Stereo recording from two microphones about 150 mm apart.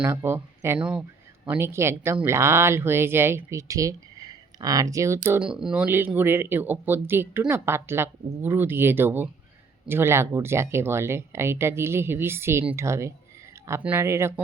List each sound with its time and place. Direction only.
0.0 s speech: 15° right (ahead or behind)
5.4 s speech: 5° right (ahead or behind)